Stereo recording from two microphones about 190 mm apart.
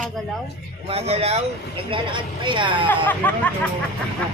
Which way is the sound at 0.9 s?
30° right (ahead or behind).